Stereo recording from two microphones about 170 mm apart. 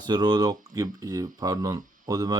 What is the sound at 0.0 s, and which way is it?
Speech, 25° right (ahead or behind).